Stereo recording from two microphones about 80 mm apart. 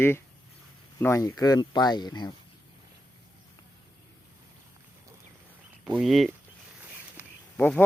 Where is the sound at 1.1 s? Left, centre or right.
Left.